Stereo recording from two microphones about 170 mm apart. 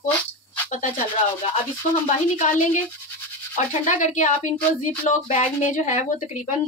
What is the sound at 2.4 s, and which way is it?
Speech, 45° left (ahead or behind).